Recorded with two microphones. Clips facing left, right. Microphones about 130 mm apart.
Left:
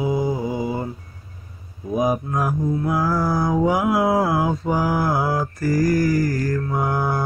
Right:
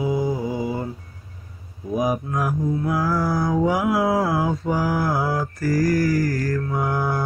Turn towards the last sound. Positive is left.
turn(degrees=20)  # may be behind; listen again after turning